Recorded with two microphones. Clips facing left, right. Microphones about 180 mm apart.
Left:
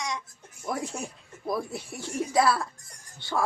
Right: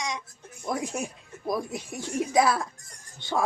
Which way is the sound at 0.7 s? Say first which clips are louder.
Right 2 dB; 15° right (ahead or behind).